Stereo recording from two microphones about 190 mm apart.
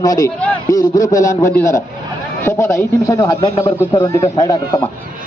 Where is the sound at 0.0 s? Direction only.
20° left (ahead or behind).